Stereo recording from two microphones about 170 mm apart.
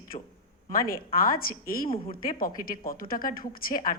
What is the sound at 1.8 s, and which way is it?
Speech, 35° left (ahead or behind).